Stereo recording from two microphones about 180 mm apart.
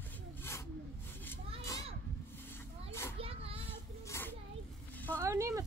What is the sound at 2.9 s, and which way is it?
Children playing, 15° left (ahead or behind).